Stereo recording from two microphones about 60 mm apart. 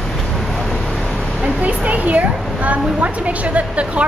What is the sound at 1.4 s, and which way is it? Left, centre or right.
A woman's voice, right.